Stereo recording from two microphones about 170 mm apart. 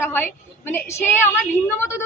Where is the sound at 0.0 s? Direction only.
10° left (ahead or behind).